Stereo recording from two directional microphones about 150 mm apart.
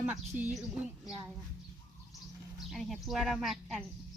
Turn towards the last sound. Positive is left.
turn(degrees=5)  # may be behind; listen again after turning